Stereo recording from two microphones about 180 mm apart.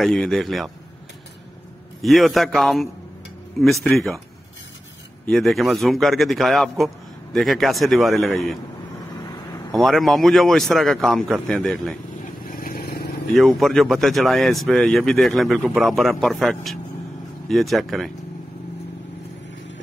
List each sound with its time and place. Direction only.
0.0 s a man's voice: centre (ahead or behind)
2.0 s a man's voice: centre (ahead or behind)
5.2 s a man's voice: centre (ahead or behind)
9.7 s a man's voice: centre (ahead or behind)
12.4 s vehicle: 55° left (ahead or behind)
13.3 s a man's voice: centre (ahead or behind)